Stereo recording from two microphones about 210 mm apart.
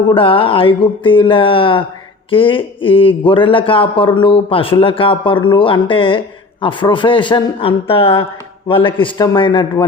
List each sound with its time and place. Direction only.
0.1 s a man's voice: 25° left (ahead or behind)